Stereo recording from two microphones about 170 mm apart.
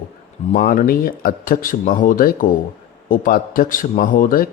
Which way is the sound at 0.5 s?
55° left (ahead or behind).